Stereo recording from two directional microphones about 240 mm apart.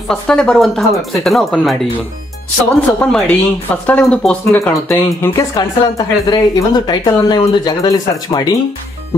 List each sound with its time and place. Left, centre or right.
0.1 s speech: centre
3.0 s speech: centre